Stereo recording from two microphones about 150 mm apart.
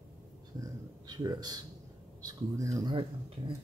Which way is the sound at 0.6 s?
25° right (ahead or behind).